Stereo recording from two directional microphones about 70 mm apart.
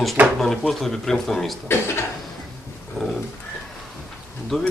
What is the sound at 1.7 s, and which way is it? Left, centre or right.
Speech, left.